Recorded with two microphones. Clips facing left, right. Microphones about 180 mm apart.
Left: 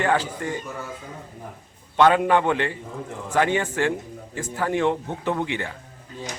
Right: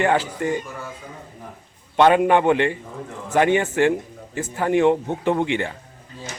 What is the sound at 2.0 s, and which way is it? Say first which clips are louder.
Speech: right 2 dB; 20° right (ahead or behind).